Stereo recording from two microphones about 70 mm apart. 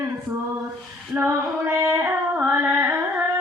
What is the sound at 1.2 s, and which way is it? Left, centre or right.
Female singing, right.